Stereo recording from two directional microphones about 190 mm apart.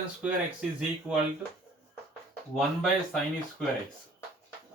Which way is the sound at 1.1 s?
5° right (ahead or behind).